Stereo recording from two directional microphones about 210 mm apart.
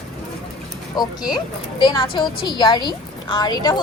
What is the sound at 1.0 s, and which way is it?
A woman's voice, 20° left (ahead or behind).